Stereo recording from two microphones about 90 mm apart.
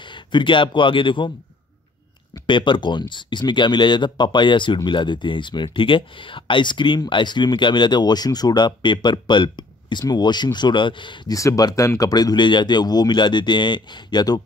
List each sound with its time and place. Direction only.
0.0 s speech: 60° left (ahead or behind)
2.4 s speech: 65° left (ahead or behind)
11.3 s speech: 40° left (ahead or behind)
12.1 s speech: 50° left (ahead or behind)